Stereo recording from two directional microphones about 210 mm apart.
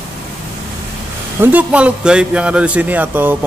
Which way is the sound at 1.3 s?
5° right (ahead or behind).